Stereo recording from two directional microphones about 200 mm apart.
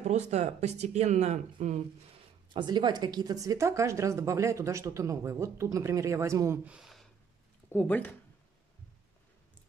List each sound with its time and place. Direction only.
0.0 s speech: 35° right (ahead or behind)
2.5 s a woman's voice: 20° right (ahead or behind); by 8.1 s 10° left (ahead or behind)